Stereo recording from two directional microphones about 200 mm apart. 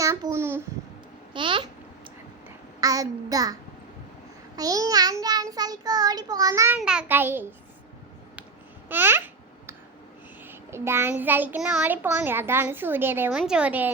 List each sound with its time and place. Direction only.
0.0 s babbling: 15° right (ahead or behind)
1.3 s babbling: 25° right (ahead or behind)
2.8 s a child's voice: 15° right (ahead or behind)
4.5 s child singing: 20° right (ahead or behind)
6.7 s a child's voice: 5° right (ahead or behind)
8.9 s babbling: 10° right (ahead or behind)
10.4 s a child's voice: 10° right (ahead or behind)